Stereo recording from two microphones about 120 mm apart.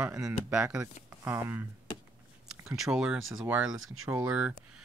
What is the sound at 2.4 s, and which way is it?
Speech, 5° right (ahead or behind).